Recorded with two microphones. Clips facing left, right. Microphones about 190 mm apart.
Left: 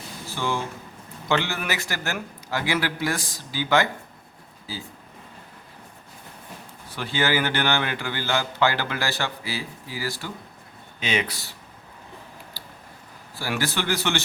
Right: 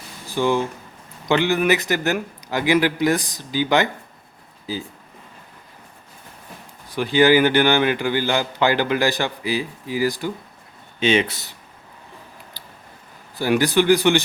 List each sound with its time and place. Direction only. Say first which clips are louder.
0.3 s a man's voice: right 8 dB; 15° right (ahead or behind)
6.8 s a man's voice: right 10 dB; 15° right (ahead or behind)
11.0 s speech: right 8 dB; 30° right (ahead or behind)
12.6 s a sound: even; 20° right (ahead or behind)
13.3 s a man's voice: right 10 dB; 20° right (ahead or behind)